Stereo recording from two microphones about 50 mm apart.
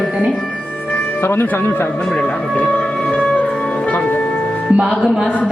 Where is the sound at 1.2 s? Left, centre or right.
Left.